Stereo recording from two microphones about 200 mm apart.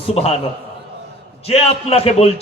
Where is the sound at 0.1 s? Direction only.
30° left (ahead or behind).